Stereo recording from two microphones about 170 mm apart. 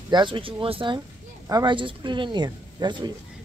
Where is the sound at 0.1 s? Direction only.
30° right (ahead or behind).